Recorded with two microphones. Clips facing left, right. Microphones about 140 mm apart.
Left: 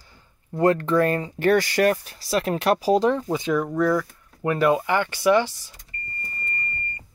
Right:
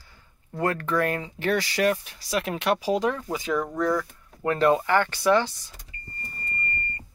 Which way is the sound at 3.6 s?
5° left (ahead or behind).